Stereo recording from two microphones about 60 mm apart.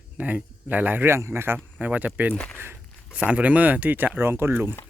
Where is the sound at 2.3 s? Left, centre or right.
Centre.